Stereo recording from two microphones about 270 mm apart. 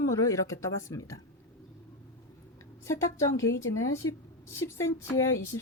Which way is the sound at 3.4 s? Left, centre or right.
Left.